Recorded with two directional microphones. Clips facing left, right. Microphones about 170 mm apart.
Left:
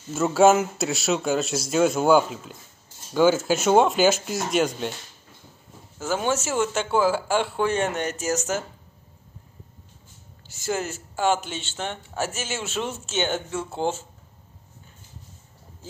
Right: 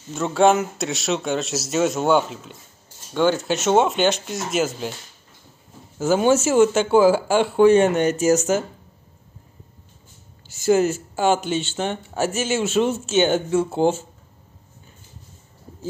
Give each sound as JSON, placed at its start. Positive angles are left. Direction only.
{"t": 0.1, "sound": "speech", "side_deg": 5}
{"t": 5.9, "sound": "speech", "side_deg": -5}
{"t": 10.6, "sound": "speech", "side_deg": -5}